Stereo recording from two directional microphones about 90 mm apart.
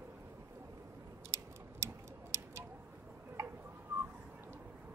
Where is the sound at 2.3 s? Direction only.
30° right (ahead or behind).